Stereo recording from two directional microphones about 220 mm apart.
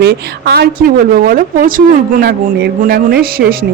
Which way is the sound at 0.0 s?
45° right (ahead or behind).